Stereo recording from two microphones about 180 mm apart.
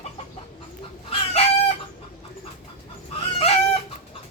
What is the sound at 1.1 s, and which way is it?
Chicken, 35° left (ahead or behind).